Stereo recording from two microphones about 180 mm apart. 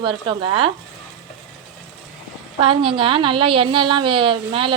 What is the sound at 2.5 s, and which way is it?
A woman's voice, 30° right (ahead or behind).